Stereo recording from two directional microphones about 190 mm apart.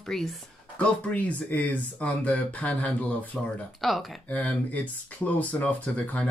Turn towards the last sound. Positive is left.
turn(degrees=5)  # may be behind; listen again after turning